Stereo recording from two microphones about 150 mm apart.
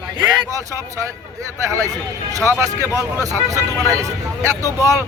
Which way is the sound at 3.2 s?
20° right (ahead or behind).